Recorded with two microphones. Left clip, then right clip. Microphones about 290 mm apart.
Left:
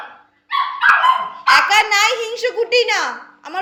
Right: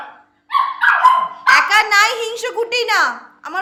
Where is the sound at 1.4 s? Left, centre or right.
Centre.